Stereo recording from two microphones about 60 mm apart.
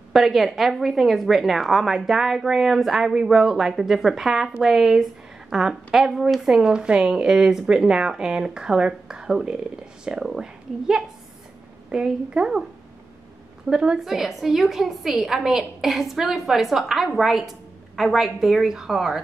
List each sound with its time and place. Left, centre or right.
0.1 s a woman's voice: centre
13.7 s a woman's voice: centre